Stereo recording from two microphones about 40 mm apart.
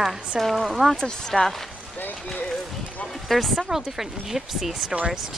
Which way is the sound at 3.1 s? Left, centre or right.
Centre.